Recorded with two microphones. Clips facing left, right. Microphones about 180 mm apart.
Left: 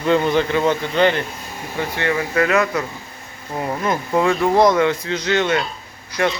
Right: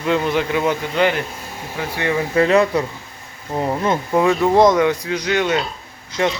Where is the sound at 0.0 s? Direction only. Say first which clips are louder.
Left 2 dB; 5° right (ahead or behind).